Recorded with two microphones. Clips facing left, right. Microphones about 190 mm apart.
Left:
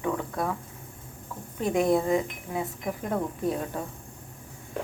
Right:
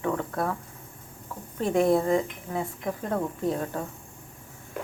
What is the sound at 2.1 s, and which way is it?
Speech, 10° left (ahead or behind).